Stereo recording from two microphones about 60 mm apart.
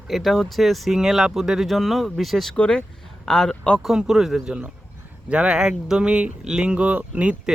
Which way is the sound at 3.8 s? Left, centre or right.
Centre.